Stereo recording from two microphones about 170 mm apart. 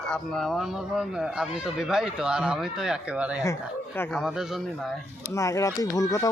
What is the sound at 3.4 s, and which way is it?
Speech, 15° left (ahead or behind).